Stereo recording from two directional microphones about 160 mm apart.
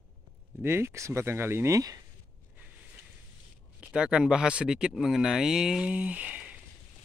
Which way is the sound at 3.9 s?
5° right (ahead or behind).